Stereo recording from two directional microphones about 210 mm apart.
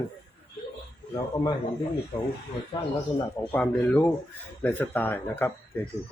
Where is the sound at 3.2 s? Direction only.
10° left (ahead or behind).